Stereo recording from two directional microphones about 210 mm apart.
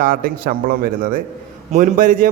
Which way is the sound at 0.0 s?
45° right (ahead or behind).